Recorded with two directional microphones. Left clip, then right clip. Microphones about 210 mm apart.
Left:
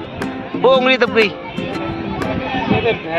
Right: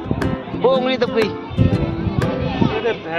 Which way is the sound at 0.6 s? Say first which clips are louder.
Left 4 dB; centre (ahead or behind).